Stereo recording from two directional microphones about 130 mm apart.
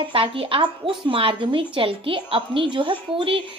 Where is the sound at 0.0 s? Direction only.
45° right (ahead or behind).